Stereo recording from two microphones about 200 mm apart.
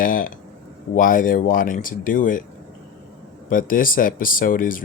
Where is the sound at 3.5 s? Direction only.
45° left (ahead or behind).